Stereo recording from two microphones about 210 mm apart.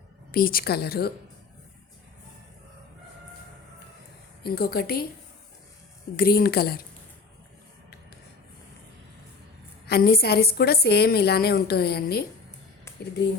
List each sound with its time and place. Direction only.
0.3 s a woman's voice: 45° left (ahead or behind)
4.4 s a woman's voice: 45° left (ahead or behind)
6.1 s a woman's voice: 45° left (ahead or behind)
9.8 s a woman's voice: 50° left (ahead or behind)